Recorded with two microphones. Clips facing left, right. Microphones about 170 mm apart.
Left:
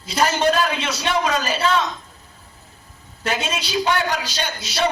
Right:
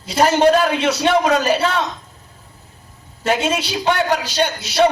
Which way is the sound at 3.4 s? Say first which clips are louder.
Right 3 dB; 60° right (ahead or behind).